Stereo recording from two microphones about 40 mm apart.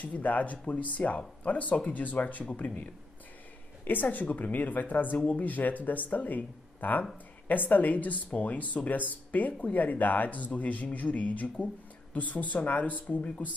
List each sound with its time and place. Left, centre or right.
0.0 s speech: left